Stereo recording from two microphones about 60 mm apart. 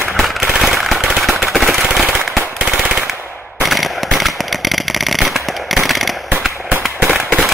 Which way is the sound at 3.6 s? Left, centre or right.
Centre.